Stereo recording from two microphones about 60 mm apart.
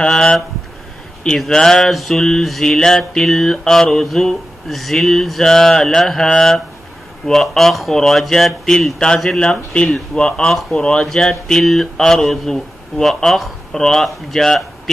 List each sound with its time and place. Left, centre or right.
0.0 s mantra: centre
1.4 s mantra: centre